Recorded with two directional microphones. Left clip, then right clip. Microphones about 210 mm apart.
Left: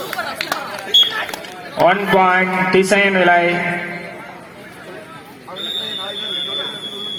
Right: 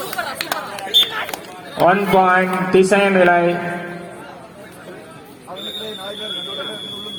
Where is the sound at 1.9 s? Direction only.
15° left (ahead or behind).